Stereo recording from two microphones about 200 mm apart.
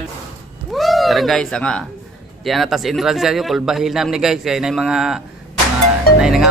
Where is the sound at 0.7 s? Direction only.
Centre (ahead or behind).